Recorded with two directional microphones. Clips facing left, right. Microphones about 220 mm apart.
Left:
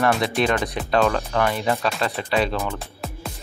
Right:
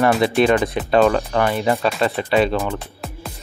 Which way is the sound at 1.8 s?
Centre (ahead or behind).